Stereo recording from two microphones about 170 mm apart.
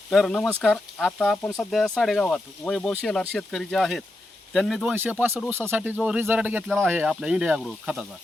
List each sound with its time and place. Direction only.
0.1 s speech: 5° left (ahead or behind)
1.4 s speech: 20° left (ahead or behind)
1.7 s speech: centre (ahead or behind)